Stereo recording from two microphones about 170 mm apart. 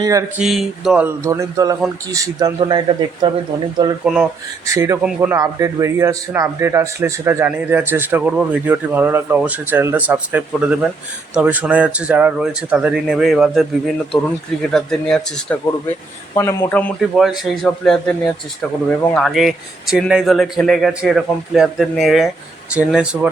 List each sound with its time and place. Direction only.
0.0 s speech: 20° right (ahead or behind)
0.3 s a man's voice: centre (ahead or behind)
1.0 s a man's voice: 15° right (ahead or behind)
4.0 s a man's voice: 5° right (ahead or behind)
4.6 s a man's voice: 20° right (ahead or behind); by 15.5 s 5° left (ahead or behind)
16.3 s a man's voice: 15° left (ahead or behind)
19.1 s a man's voice: centre (ahead or behind)